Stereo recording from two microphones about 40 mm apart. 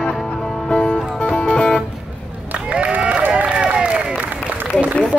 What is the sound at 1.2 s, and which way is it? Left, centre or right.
Music, left.